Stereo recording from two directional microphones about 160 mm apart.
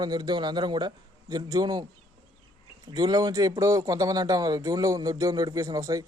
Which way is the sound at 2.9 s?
25° right (ahead or behind).